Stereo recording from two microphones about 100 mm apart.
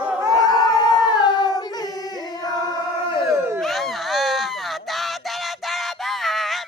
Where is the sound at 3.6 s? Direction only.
Centre (ahead or behind).